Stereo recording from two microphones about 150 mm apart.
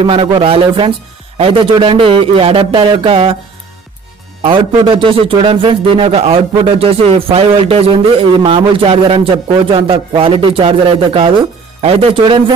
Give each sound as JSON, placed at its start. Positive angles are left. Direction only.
{"t": 0.0, "sound": "a man's voice", "side_deg": -35}
{"t": 4.4, "sound": "a man's voice", "side_deg": -35}